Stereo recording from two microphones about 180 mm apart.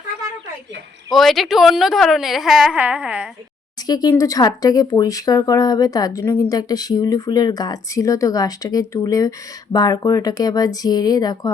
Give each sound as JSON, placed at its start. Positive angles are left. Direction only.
{"t": 1.1, "sound": "speech", "side_deg": 0}
{"t": 3.8, "sound": "speech", "side_deg": 20}